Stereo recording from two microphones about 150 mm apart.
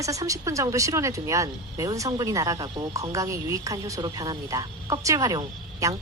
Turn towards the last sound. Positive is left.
turn(degrees=-25)  # may be behind; listen again after turning